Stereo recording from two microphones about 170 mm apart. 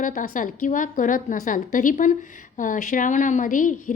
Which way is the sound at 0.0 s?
50° left (ahead or behind).